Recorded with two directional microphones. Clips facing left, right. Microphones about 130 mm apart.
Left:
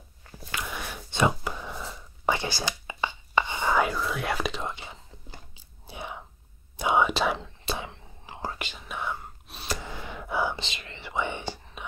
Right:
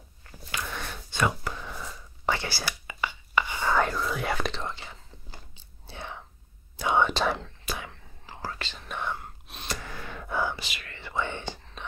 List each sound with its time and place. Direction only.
0.6 s a sound: 10° left (ahead or behind)
1.1 s whispering: 15° left (ahead or behind)
3.7 s whispering: 5° left (ahead or behind)
7.6 s whispering: 25° left (ahead or behind); by 9.8 s 5° left (ahead or behind)
9.8 s gasp: 15° left (ahead or behind)
10.5 s whispering: 25° left (ahead or behind)